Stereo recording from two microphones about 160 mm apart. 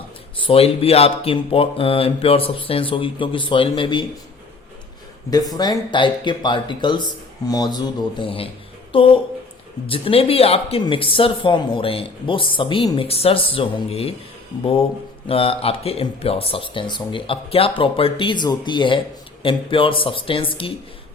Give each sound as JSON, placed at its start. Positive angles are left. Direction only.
{"t": 0.3, "sound": "speech", "side_deg": 35}
{"t": 5.3, "sound": "speech", "side_deg": 25}
{"t": 8.2, "sound": "speech", "side_deg": 35}